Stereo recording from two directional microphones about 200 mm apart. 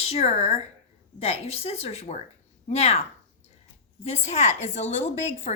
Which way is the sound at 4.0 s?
35° left (ahead or behind).